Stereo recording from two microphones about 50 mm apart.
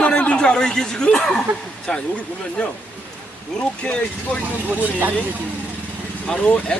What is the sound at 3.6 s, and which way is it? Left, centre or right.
Speech, left.